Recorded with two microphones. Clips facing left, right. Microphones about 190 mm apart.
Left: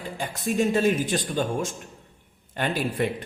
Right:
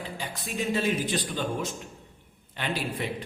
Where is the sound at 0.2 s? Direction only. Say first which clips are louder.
Left 10 dB; 45° left (ahead or behind).